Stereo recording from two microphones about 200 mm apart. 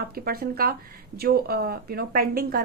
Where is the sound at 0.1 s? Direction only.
50° right (ahead or behind).